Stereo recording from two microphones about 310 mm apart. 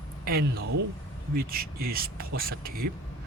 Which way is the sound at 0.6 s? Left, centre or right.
Right.